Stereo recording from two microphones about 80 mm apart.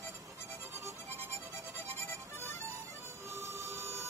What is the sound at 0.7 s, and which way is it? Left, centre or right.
Music, right.